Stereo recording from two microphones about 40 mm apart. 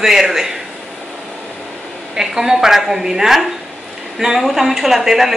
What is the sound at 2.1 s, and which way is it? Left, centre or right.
Speech, centre.